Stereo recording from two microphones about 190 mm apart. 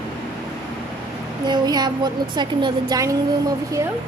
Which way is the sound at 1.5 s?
20° right (ahead or behind).